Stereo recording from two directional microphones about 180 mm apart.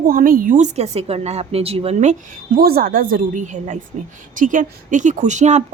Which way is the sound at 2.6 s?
55° right (ahead or behind).